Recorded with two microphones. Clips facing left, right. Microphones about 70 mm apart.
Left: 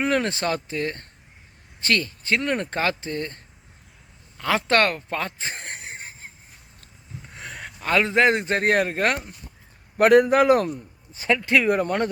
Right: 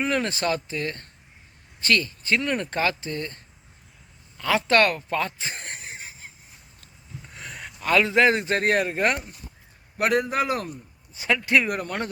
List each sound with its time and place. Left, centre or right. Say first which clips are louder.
0.0 s speech: left 2 dB; left
1.8 s speech: even; left
5.1 s a sound: right 1 dB; left
7.3 s a sound: left 2 dB; left
7.8 s a man's voice: even; left
11.7 s speech: left 7 dB; left